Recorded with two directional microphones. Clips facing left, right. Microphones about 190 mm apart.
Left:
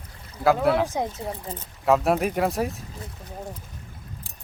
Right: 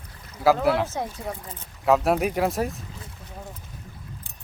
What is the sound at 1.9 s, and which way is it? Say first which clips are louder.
Speech: even; centre (ahead or behind).